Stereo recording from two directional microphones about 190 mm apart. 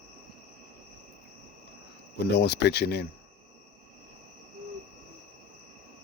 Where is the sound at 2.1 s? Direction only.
60° left (ahead or behind).